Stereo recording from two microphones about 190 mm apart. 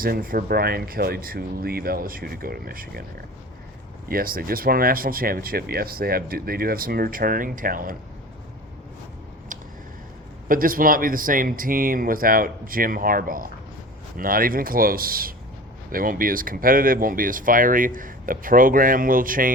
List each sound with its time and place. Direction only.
0.0 s speech: 50° right (ahead or behind)
4.1 s speech: 50° right (ahead or behind)
10.5 s speech: 50° right (ahead or behind)